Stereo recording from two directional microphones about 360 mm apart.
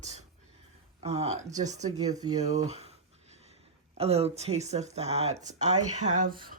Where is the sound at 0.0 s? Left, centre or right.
Centre.